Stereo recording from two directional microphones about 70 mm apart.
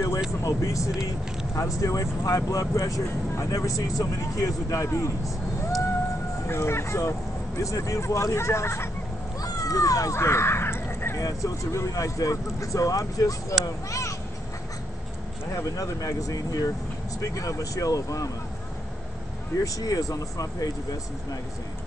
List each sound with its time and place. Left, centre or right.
0.4 s speech: left
6.4 s speech: left
9.4 s cat: left
10.1 s crow: left
11.1 s speech: left
15.5 s speech: left
19.6 s speech: left